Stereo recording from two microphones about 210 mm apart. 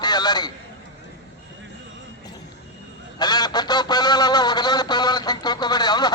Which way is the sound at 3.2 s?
20° left (ahead or behind).